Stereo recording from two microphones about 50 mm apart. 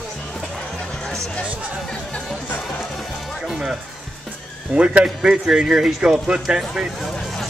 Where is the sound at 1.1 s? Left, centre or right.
Centre.